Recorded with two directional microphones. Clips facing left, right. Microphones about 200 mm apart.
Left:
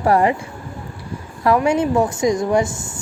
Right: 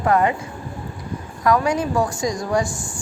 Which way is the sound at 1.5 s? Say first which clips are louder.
Left 3 dB; 25° left (ahead or behind).